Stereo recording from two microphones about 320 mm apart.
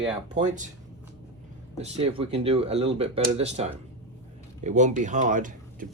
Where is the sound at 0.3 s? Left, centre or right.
Right.